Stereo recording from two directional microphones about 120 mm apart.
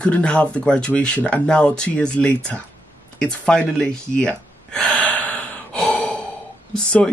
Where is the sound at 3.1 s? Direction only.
5° left (ahead or behind).